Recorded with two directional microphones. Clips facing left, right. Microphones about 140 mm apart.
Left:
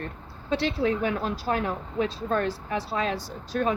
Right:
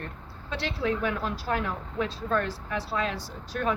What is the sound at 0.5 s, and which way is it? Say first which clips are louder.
Speech: left 4 dB; 25° left (ahead or behind).